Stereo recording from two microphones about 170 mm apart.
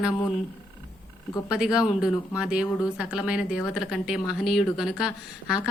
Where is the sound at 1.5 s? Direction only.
5° right (ahead or behind).